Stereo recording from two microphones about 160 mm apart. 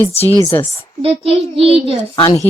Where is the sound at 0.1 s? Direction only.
15° left (ahead or behind).